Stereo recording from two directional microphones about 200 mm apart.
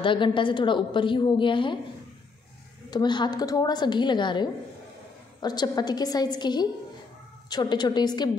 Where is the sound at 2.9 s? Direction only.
20° left (ahead or behind).